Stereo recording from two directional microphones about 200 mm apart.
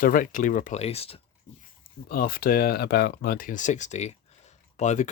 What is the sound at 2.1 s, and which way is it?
Speech, 45° left (ahead or behind).